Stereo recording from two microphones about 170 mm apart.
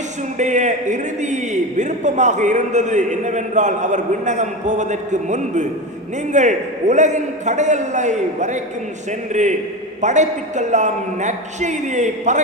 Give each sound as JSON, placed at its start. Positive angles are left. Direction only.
{"t": 0.3, "sound": "a man's voice", "side_deg": -45}